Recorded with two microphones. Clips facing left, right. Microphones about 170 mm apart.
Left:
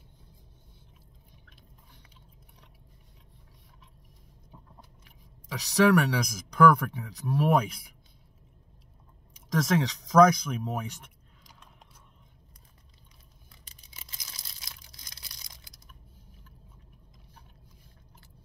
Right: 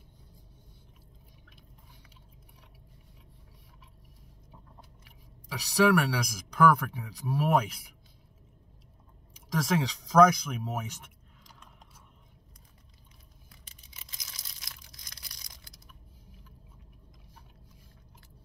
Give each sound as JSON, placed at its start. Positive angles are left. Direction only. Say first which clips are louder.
{"t": 5.0, "sound": "speech", "louder": "right 1 dB", "side_deg": -5}
{"t": 9.5, "sound": "speech", "louder": "left 2 dB", "side_deg": -5}
{"t": 14.6, "sound": "a sound", "louder": "left 1 dB", "side_deg": 25}